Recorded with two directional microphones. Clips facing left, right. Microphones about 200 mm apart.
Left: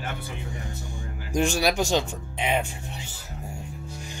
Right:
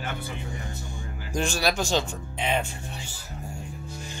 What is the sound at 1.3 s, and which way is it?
Speech, 15° left (ahead or behind).